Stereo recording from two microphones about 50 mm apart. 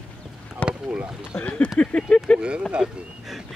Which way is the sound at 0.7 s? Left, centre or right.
Right.